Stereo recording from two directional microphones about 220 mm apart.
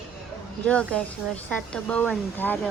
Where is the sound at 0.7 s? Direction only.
5° left (ahead or behind).